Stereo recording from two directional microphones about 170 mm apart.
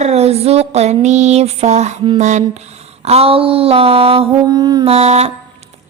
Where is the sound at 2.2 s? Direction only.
45° right (ahead or behind).